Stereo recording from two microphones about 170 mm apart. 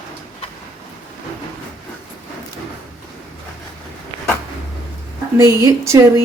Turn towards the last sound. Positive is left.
turn(degrees=-15)  # may be behind; listen again after turning